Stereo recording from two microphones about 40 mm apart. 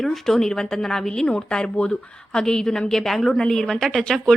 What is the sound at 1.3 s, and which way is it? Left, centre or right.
A woman's voice, left.